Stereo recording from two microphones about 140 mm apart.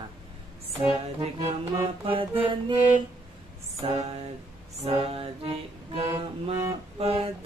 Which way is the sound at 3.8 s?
40° right (ahead or behind).